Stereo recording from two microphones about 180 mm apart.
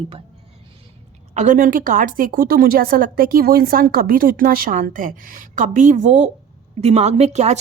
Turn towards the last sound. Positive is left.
turn(degrees=-40)  # may be behind; listen again after turning